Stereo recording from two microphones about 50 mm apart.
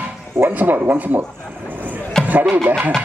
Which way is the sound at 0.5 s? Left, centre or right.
Right.